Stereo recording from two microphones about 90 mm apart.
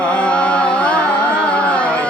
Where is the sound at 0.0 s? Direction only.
15° left (ahead or behind).